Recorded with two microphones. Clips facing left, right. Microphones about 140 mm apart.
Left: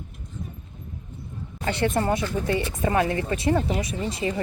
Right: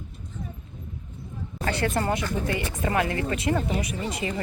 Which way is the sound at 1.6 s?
20° left (ahead or behind).